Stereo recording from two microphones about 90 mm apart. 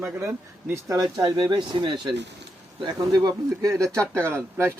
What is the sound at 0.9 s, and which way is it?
Speech, 45° right (ahead or behind).